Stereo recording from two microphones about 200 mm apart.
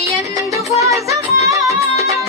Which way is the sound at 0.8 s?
15° right (ahead or behind).